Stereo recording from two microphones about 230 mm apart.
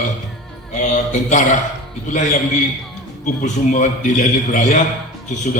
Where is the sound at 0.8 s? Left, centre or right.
Left.